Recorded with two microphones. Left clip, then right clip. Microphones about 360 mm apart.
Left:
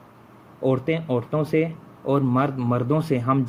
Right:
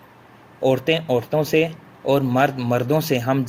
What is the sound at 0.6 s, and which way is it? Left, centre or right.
Speech, right.